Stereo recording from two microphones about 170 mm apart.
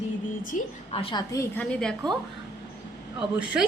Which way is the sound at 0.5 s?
50° left (ahead or behind).